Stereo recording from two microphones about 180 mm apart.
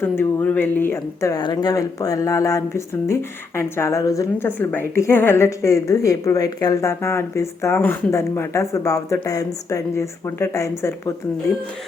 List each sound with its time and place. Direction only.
0.0 s speech: 10° left (ahead or behind)